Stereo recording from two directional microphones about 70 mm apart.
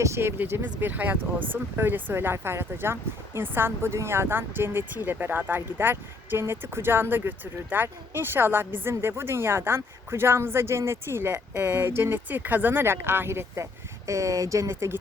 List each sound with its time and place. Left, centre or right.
0.0 s speech: right
14.1 s speech: right